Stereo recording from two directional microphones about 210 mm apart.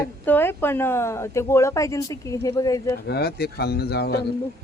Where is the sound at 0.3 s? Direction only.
10° left (ahead or behind).